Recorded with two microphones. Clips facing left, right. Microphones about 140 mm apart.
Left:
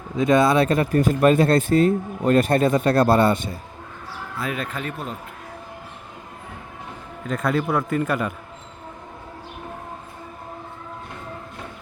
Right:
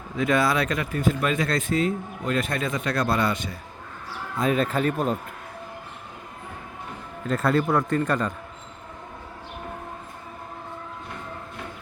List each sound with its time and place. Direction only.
0.2 s speech: 25° left (ahead or behind)
1.7 s speech: 50° left (ahead or behind); by 3.3 s 30° left (ahead or behind)
4.4 s speech: 30° right (ahead or behind)
7.3 s a man's voice: centre (ahead or behind)